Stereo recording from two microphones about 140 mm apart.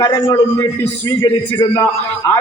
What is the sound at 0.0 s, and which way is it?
Speech, 20° left (ahead or behind).